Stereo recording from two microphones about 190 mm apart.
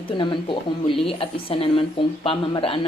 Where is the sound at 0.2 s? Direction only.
25° left (ahead or behind).